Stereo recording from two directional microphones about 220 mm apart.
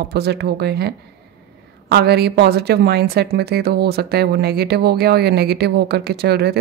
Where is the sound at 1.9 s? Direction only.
45° right (ahead or behind).